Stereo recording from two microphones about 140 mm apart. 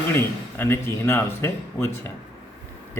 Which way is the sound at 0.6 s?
15° left (ahead or behind).